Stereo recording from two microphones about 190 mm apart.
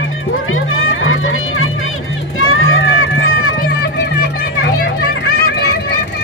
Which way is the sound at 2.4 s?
90° left.